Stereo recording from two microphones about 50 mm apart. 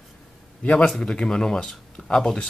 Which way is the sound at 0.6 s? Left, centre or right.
Left.